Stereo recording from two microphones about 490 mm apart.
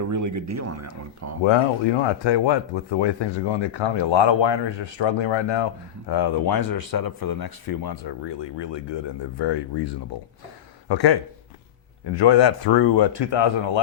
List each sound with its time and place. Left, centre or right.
0.0 s speech: right
1.5 s speech: left
8.5 s speech: left
10.8 s speech: left
12.2 s speech: left